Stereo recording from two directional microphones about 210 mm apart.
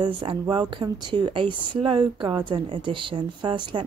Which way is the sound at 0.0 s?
25° right (ahead or behind).